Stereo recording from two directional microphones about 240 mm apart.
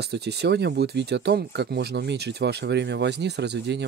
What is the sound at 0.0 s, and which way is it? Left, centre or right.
Speech, right.